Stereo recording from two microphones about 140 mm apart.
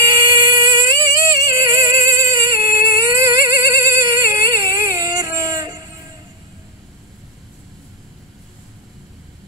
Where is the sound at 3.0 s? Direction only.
25° right (ahead or behind).